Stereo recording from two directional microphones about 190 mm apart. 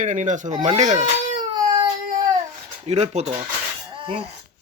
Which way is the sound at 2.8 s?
35° right (ahead or behind).